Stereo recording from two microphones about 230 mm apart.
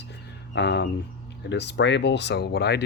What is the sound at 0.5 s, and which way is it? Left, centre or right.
Speech, left.